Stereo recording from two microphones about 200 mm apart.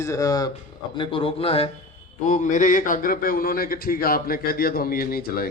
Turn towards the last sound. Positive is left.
turn(degrees=50)  # may be behind; listen again after turning